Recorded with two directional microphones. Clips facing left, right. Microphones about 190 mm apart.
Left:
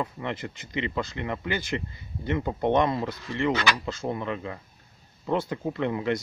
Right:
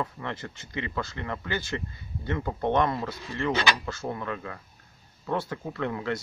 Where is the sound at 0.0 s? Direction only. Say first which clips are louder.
Left 2 dB; 15° left (ahead or behind).